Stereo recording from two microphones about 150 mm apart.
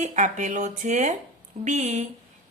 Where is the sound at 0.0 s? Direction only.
55° right (ahead or behind).